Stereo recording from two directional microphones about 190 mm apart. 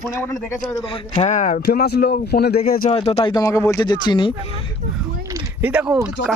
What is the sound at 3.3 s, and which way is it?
Speech, 15° left (ahead or behind).